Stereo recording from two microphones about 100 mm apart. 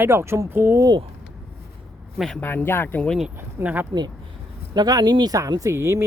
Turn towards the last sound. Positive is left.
turn(degrees=-30)  # may be behind; listen again after turning